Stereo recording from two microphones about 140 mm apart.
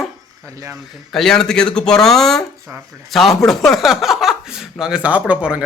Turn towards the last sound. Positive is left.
turn(degrees=-10)  # may be behind; listen again after turning